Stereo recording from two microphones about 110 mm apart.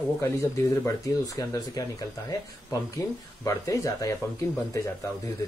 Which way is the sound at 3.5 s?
30° left (ahead or behind).